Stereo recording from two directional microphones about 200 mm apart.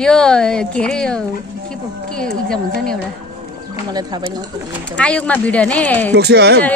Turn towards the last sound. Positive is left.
turn(degrees=-55)  # may be behind; listen again after turning